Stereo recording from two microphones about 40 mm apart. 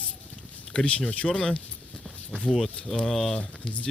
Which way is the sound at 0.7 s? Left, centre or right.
Left.